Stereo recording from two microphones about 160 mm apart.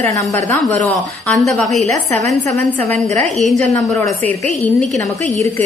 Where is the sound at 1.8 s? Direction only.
45° right (ahead or behind).